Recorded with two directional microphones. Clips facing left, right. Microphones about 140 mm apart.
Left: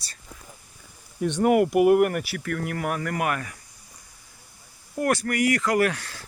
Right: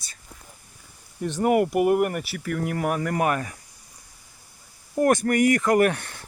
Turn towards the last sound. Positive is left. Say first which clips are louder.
# right 3 dB
turn(degrees=-25)  # may be behind; listen again after turning